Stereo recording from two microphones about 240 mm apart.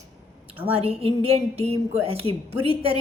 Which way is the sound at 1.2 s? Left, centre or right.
Right.